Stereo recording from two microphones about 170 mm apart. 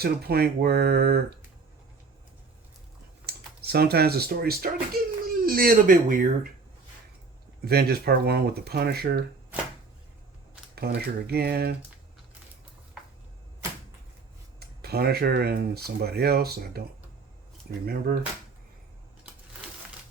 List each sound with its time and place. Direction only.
0.0 s speech: 65° right (ahead or behind)
3.2 s speech: 70° right (ahead or behind); by 6.5 s 55° right (ahead or behind)
7.6 s speech: 65° right (ahead or behind)
10.8 s speech: 70° right (ahead or behind)
14.6 s speech: 65° right (ahead or behind)
17.8 s speech: 65° right (ahead or behind)